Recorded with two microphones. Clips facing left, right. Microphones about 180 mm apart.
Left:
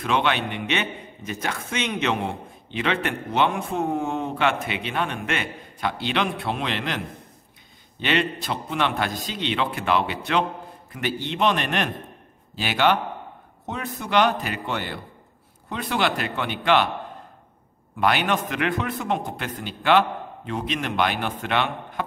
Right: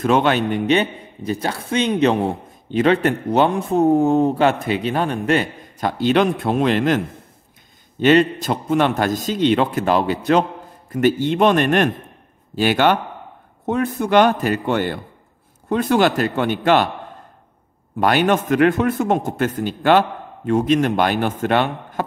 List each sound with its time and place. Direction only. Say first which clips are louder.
0.0 s a man's voice: right 7 dB; 40° right (ahead or behind)
8.0 s a man's voice: right 10 dB; 45° right (ahead or behind)
17.9 s a man's voice: right 6 dB; 45° right (ahead or behind)